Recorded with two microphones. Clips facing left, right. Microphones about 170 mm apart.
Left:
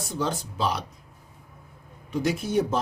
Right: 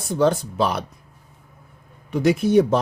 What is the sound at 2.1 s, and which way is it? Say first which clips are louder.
Speech: right 8 dB; 65° right (ahead or behind).